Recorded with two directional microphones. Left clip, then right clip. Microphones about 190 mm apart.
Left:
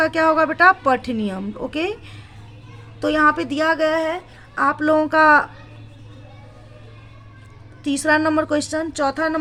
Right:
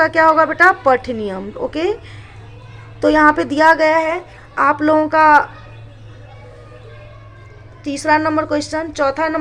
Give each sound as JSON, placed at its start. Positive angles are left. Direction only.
{"t": 0.0, "sound": "a woman's voice", "side_deg": 25}
{"t": 7.9, "sound": "a woman's voice", "side_deg": 35}